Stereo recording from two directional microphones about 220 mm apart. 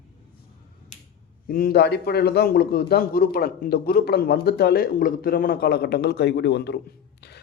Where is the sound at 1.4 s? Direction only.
40° left (ahead or behind).